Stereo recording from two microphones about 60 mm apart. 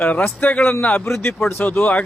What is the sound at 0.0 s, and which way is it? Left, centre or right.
Speech, left.